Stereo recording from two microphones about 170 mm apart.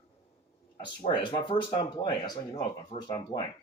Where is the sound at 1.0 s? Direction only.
30° left (ahead or behind).